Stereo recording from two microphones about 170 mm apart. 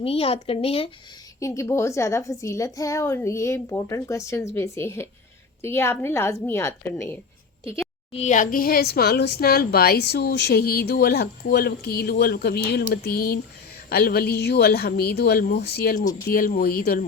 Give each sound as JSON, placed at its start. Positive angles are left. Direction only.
{"t": 0.0, "sound": "speech", "side_deg": 35}
{"t": 1.4, "sound": "a woman's voice", "side_deg": 20}
{"t": 8.1, "sound": "a woman's voice", "side_deg": 45}